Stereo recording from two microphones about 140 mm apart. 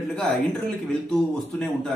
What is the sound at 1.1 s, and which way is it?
Speech, 5° left (ahead or behind).